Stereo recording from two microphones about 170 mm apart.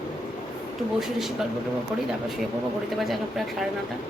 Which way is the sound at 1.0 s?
Centre (ahead or behind).